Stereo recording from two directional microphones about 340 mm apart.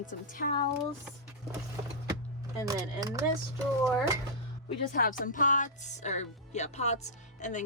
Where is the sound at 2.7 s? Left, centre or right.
Centre.